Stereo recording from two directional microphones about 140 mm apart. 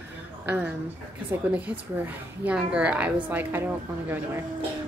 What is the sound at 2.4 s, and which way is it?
A woman's voice, 10° right (ahead or behind).